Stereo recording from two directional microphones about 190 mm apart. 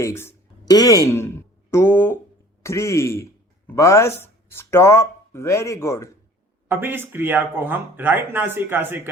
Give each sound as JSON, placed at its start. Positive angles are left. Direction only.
{"t": 0.0, "sound": "speech", "side_deg": 15}
{"t": 6.7, "sound": "speech", "side_deg": -10}